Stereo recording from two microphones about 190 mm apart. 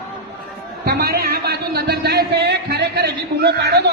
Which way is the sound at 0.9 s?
55° right (ahead or behind).